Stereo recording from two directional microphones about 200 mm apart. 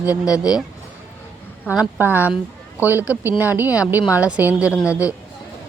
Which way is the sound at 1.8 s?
10° right (ahead or behind).